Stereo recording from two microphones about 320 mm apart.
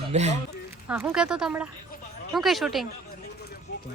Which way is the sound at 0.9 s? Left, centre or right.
Centre.